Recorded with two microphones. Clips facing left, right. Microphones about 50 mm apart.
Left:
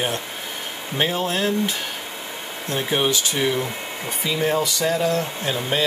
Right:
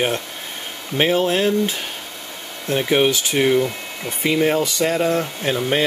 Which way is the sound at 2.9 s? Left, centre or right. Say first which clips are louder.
Right 4 dB; right.